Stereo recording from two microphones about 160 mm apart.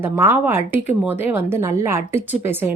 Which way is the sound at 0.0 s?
15° right (ahead or behind).